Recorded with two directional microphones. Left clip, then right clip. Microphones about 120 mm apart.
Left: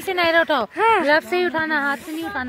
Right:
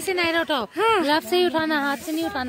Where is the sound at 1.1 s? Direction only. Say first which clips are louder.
Left 1 dB; 50° right (ahead or behind); by 2.0 s 90° right.